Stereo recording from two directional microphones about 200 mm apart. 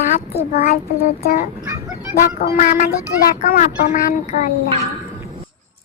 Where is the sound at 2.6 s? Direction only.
40° left (ahead or behind).